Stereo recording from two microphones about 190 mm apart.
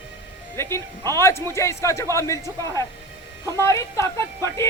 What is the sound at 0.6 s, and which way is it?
A woman's voice, 15° left (ahead or behind).